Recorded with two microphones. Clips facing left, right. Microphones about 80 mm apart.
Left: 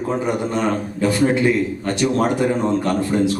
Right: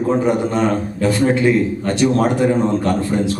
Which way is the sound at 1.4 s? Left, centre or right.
Right.